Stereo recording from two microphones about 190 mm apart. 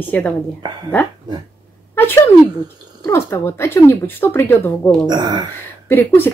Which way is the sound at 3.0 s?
15° left (ahead or behind).